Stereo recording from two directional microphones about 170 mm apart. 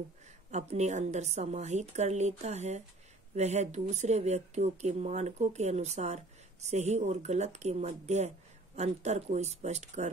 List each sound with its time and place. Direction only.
0.5 s a woman's voice: 40° right (ahead or behind)